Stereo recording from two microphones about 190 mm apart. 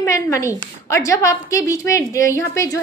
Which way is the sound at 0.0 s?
15° left (ahead or behind).